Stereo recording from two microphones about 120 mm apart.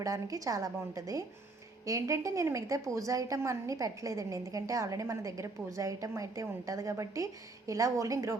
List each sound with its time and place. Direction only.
0.0 s a woman's voice: 25° right (ahead or behind)